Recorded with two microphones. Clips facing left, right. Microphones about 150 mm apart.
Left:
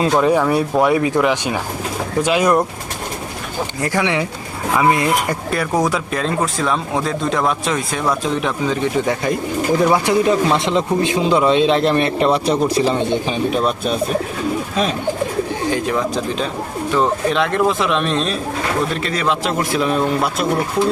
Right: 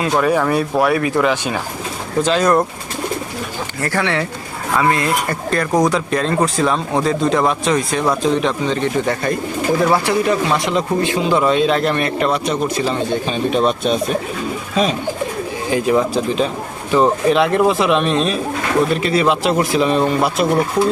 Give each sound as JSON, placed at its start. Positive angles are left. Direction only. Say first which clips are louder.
{"t": 0.3, "sound": "speech", "louder": "left 1 dB", "side_deg": 10}
{"t": 3.8, "sound": "a man's voice", "louder": "even", "side_deg": 15}
{"t": 13.1, "sound": "speech", "louder": "even", "side_deg": 15}
{"t": 15.7, "sound": "speech", "louder": "right 6 dB", "side_deg": -5}